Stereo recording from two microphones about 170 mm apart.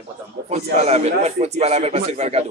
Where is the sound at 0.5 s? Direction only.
40° right (ahead or behind).